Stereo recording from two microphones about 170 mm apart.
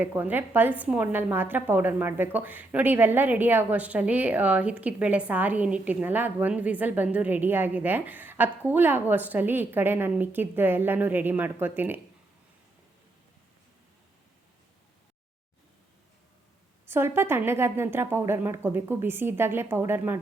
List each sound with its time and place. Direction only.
0.0 s a woman's voice: 10° right (ahead or behind)
16.9 s a woman's voice: 15° right (ahead or behind)